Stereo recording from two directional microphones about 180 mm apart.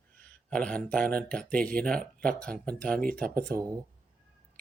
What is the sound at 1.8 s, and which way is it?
Speech, 5° left (ahead or behind).